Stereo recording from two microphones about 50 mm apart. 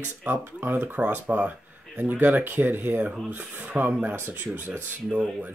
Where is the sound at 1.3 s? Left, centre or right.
Right.